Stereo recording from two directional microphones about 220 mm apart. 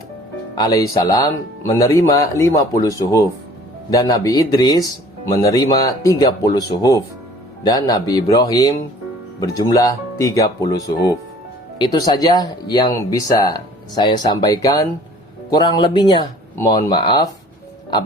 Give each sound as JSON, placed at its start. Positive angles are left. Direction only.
{"t": 0.5, "sound": "speech", "side_deg": 15}